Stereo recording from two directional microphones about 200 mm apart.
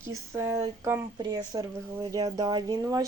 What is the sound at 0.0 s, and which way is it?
Speech, 15° right (ahead or behind).